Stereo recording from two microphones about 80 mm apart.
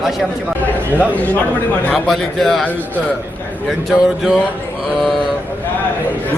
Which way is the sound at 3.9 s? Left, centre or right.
Centre.